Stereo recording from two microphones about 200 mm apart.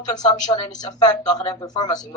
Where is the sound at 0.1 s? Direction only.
20° left (ahead or behind).